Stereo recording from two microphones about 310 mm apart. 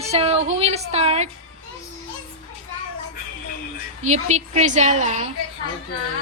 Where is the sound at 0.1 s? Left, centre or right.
Centre.